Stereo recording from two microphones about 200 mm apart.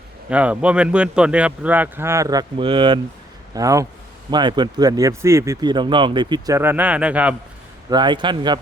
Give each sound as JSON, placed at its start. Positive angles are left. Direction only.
{"t": 0.3, "sound": "speech", "side_deg": -5}
{"t": 7.9, "sound": "speech", "side_deg": -20}